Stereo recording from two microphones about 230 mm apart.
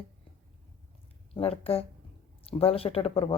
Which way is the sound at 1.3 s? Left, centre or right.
Left.